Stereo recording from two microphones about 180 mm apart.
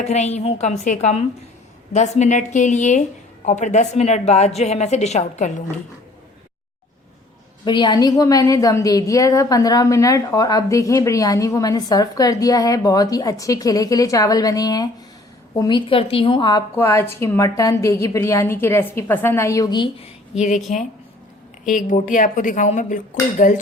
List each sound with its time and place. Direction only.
0.0 s a woman's voice: 40° left (ahead or behind)
7.6 s a woman's voice: 25° left (ahead or behind)
16.7 s a woman's voice: 15° left (ahead or behind)
20.3 s a woman's voice: 40° left (ahead or behind)
21.6 s a woman's voice: 45° left (ahead or behind)